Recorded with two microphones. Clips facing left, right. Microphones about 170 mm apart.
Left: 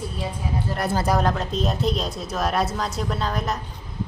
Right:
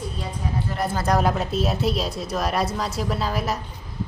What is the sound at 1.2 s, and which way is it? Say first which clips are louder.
Speech: right 1 dB; 10° right (ahead or behind).